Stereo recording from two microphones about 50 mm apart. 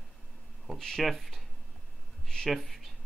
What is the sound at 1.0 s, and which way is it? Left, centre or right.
Speech, centre.